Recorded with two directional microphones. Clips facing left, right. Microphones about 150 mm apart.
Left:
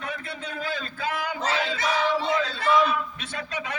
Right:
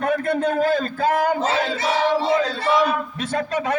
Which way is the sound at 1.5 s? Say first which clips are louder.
Right 5 dB; 40° right (ahead or behind).